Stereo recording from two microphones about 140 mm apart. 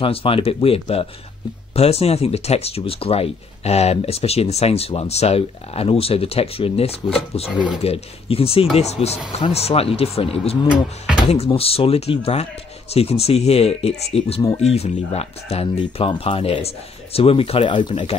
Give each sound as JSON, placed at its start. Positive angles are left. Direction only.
{"t": 0.0, "sound": "speech", "side_deg": 40}
{"t": 10.7, "sound": "speech", "side_deg": -5}
{"t": 11.2, "sound": "speech", "side_deg": 45}